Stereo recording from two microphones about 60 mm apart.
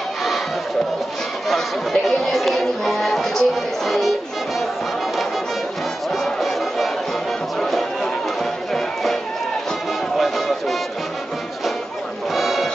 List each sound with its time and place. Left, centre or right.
1.5 s speech: centre
6.1 s music: centre
12.3 s music: centre